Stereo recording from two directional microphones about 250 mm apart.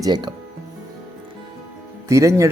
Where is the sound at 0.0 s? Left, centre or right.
Centre.